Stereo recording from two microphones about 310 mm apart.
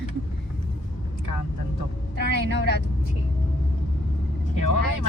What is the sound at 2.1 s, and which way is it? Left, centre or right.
Speech, left.